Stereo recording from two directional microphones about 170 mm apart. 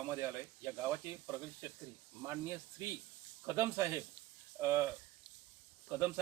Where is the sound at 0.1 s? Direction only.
15° right (ahead or behind).